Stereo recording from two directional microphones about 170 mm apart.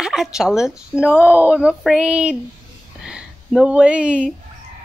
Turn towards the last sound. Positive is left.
turn(degrees=-5)  # may be behind; listen again after turning